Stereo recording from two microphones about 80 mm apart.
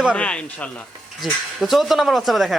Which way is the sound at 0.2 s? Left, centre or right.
Centre.